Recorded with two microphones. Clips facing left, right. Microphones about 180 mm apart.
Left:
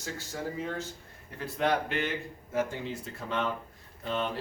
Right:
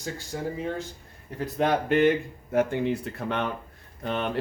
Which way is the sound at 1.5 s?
50° right (ahead or behind).